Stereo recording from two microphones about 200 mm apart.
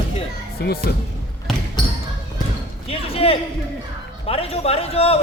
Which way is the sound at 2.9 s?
30° left (ahead or behind).